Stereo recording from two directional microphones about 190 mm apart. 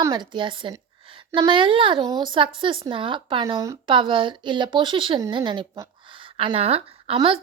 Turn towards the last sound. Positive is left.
turn(degrees=-30)  # may be behind; listen again after turning